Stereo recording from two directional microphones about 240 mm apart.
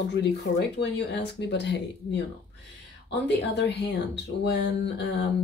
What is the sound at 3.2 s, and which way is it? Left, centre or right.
A woman's voice, left.